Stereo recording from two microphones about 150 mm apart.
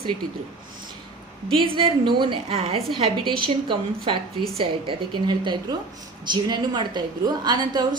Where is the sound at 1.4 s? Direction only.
35° right (ahead or behind).